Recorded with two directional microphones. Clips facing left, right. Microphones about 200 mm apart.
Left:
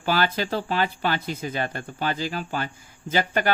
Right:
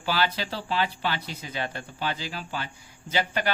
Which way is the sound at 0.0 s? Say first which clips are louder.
Left 4 dB; 50° left (ahead or behind).